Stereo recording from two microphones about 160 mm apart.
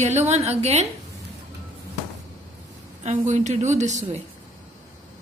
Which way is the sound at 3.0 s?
50° right (ahead or behind).